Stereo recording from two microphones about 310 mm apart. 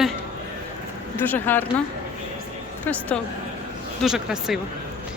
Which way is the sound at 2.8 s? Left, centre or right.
Centre.